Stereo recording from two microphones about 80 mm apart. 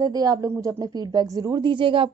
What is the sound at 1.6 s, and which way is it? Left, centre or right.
Speech, right.